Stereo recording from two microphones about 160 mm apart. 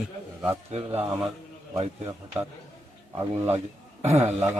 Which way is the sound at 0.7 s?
40° right (ahead or behind).